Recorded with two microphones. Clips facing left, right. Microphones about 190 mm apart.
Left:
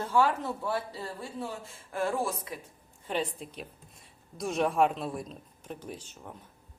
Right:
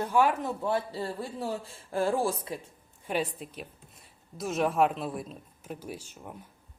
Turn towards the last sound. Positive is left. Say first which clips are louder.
# right 1 dB
turn(degrees=-10)  # may be behind; listen again after turning